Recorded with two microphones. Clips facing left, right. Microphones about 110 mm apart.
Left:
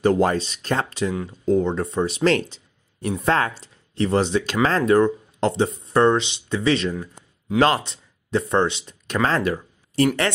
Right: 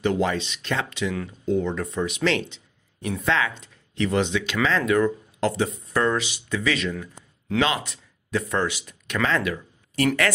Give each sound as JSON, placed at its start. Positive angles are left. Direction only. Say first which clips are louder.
{"t": 0.0, "sound": "speech", "louder": "left 5 dB", "side_deg": 40}